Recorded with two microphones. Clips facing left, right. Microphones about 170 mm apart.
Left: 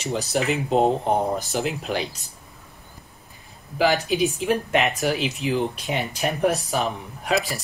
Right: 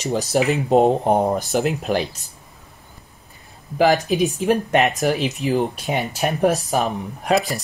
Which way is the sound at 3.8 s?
40° right (ahead or behind).